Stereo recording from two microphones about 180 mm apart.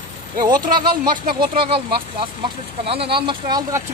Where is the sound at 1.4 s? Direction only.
30° right (ahead or behind).